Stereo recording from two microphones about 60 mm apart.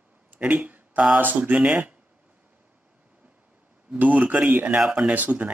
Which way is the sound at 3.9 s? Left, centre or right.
Right.